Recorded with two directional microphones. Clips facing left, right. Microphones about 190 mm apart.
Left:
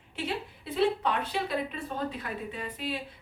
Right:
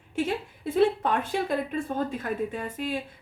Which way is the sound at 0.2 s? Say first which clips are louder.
Right 6 dB; 45° right (ahead or behind).